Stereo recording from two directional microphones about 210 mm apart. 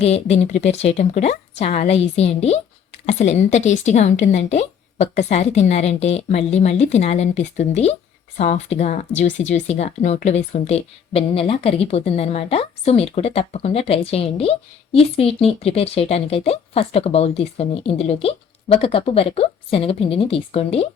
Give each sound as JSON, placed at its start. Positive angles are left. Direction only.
{"t": 0.0, "sound": "a woman's voice", "side_deg": 30}